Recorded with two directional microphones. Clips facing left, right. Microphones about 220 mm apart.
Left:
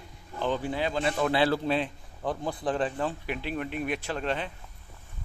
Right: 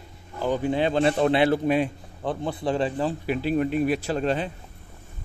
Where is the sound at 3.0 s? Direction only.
35° right (ahead or behind).